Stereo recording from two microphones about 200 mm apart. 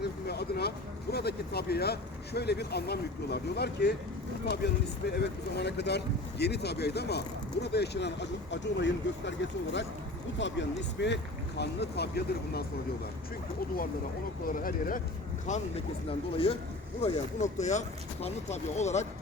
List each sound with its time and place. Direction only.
0.0 s vehicle: 55° left (ahead or behind)
1.1 s speech: 55° left (ahead or behind)
10.3 s speech: 65° left (ahead or behind)
14.4 s speech: 45° left (ahead or behind)
17.0 s speech: 35° left (ahead or behind)